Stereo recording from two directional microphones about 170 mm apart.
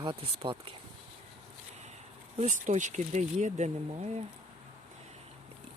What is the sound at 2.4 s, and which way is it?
Speech, 45° right (ahead or behind).